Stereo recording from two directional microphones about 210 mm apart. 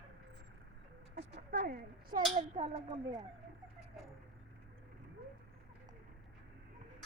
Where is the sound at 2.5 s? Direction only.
30° right (ahead or behind).